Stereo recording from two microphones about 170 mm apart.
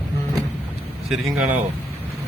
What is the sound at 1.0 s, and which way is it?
Speech, centre (ahead or behind).